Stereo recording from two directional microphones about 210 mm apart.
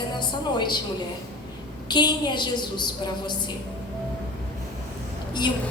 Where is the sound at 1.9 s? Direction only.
20° left (ahead or behind).